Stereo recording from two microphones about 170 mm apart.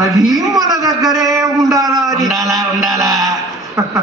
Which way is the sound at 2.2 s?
Centre (ahead or behind).